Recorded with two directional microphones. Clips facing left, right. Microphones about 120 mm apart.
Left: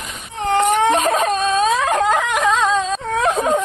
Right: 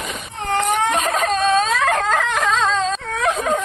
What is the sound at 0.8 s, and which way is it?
Whimper, 25° left (ahead or behind).